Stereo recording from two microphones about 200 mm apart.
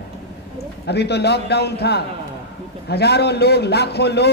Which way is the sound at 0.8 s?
55° left (ahead or behind).